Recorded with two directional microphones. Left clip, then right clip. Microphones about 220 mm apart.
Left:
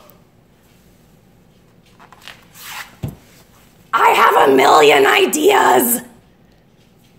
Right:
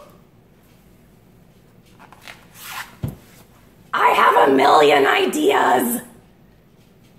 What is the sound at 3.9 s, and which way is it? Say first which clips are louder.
Speech: left 3 dB; 40° left (ahead or behind).